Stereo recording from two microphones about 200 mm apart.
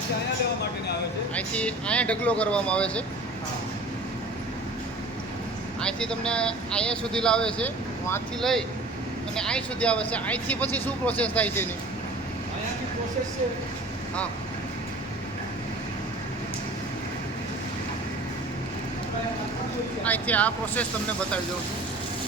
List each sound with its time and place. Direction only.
1.4 s speech: 5° left (ahead or behind)
5.8 s speech: 5° left (ahead or behind)
20.1 s speech: 10° left (ahead or behind)